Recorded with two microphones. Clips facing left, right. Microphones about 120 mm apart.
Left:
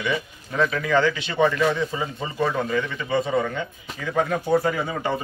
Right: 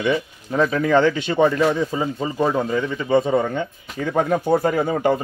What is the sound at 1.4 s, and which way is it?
Speech, 30° right (ahead or behind).